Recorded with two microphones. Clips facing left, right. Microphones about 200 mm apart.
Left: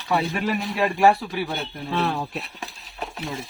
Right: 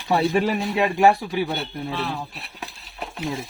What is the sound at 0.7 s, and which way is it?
Speech, 20° right (ahead or behind).